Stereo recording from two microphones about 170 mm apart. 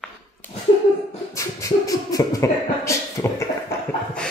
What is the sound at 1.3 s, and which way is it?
Beatboxing, 20° left (ahead or behind).